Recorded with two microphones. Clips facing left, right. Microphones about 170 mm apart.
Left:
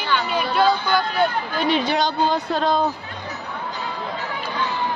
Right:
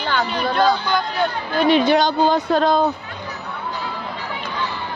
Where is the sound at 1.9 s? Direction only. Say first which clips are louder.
Right 4 dB; 50° right (ahead or behind).